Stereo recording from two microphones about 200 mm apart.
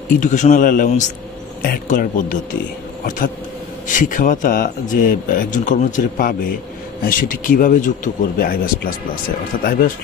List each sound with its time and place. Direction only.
0.2 s speech: 35° left (ahead or behind)
3.8 s speech: 40° left (ahead or behind)